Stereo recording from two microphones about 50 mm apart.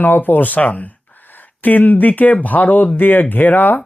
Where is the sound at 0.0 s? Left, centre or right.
Left.